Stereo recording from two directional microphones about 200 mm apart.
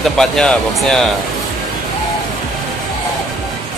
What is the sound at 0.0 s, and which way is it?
Speech, 5° left (ahead or behind).